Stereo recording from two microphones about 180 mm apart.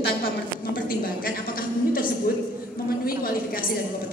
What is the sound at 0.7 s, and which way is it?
A woman's voice, 55° left (ahead or behind).